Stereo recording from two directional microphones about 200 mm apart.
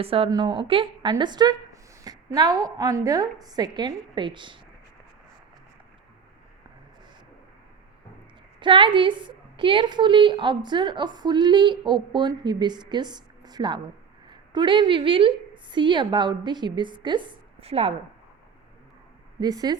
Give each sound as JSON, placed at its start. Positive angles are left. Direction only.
{"t": 0.0, "sound": "speech", "side_deg": -30}
{"t": 8.5, "sound": "a woman's voice", "side_deg": -25}
{"t": 19.4, "sound": "speech", "side_deg": -20}